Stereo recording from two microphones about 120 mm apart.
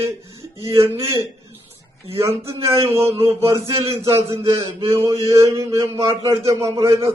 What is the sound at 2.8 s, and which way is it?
A man's voice, 20° right (ahead or behind).